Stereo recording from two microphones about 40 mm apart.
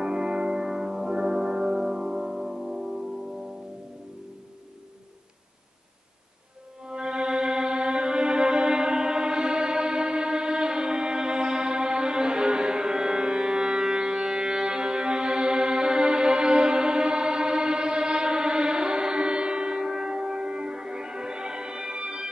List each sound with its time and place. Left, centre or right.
0.0 s music: centre
6.8 s music: right